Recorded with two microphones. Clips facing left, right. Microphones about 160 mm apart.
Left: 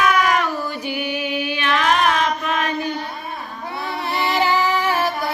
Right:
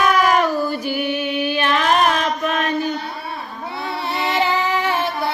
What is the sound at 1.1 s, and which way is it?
Music, 40° right (ahead or behind).